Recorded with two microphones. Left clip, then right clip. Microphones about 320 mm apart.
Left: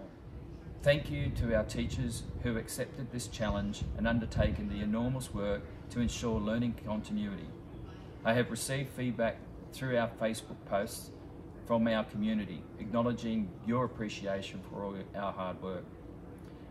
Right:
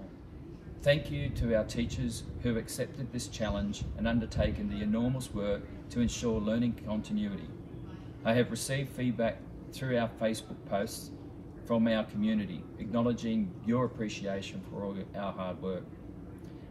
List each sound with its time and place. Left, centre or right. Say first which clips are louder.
0.8 s speech: right 1 dB; centre